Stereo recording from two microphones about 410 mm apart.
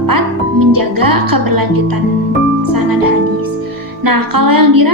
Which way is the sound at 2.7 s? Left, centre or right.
Right.